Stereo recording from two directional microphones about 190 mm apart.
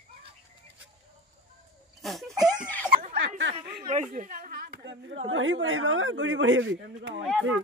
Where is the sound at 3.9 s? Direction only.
45° right (ahead or behind).